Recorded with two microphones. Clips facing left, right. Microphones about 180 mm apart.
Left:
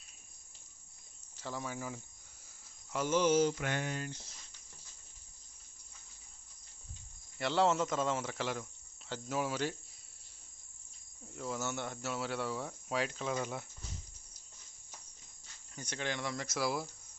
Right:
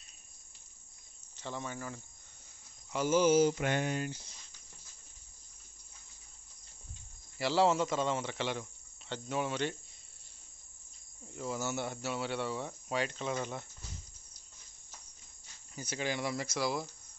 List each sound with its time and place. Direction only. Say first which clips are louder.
1.3 s cricket: even; 5° left (ahead or behind)
2.9 s speech: right 3 dB; 5° right (ahead or behind)
3.5 s a sound: right 5 dB; 20° right (ahead or behind)
4.1 s speech: right 3 dB; centre (ahead or behind)
7.3 s speech: right 2 dB; 5° right (ahead or behind)
11.2 s speech: right 2 dB; centre (ahead or behind)
15.7 s speech: right 3 dB; 5° right (ahead or behind)
16.4 s speech: right 1 dB; centre (ahead or behind)